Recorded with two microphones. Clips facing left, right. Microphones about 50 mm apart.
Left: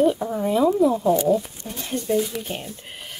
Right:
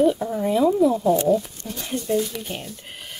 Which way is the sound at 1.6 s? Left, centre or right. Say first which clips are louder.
Even; centre.